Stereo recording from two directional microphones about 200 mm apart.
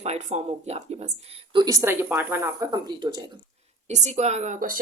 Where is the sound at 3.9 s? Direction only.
35° right (ahead or behind).